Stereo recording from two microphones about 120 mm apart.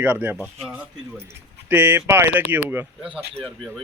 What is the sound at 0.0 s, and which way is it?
A man's voice, 15° right (ahead or behind).